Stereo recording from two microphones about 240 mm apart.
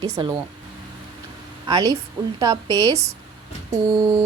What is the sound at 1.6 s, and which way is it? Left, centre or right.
Speech, centre.